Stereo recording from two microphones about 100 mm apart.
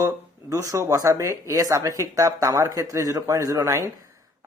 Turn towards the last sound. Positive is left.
turn(degrees=-30)  # may be behind; listen again after turning